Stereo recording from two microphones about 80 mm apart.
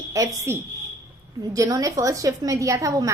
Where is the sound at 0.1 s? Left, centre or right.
Right.